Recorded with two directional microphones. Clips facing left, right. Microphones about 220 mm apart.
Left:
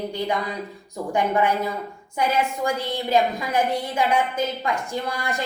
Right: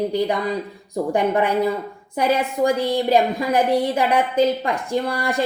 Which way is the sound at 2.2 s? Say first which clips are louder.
Right 4 dB; 35° right (ahead or behind).